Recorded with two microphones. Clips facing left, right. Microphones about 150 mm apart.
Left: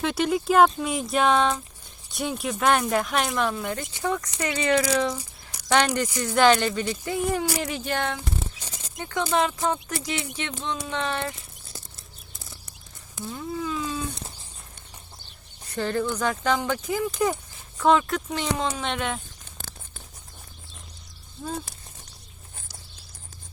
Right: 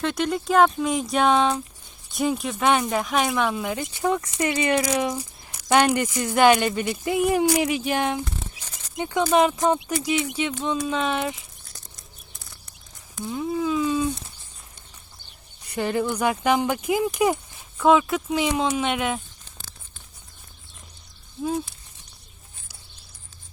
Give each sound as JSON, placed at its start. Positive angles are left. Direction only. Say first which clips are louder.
{"t": 0.0, "sound": "speech", "louder": "left 1 dB", "side_deg": 5}
{"t": 13.2, "sound": "speech", "louder": "right 6 dB", "side_deg": -15}
{"t": 15.7, "sound": "speech", "louder": "right 2 dB", "side_deg": -10}